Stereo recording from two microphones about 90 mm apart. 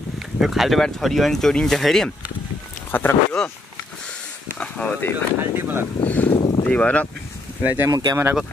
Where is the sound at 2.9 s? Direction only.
20° left (ahead or behind).